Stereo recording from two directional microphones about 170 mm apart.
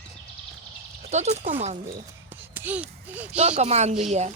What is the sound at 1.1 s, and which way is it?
Speech, 40° right (ahead or behind).